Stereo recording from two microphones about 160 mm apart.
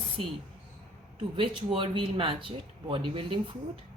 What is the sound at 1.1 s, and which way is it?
Speech, 30° right (ahead or behind).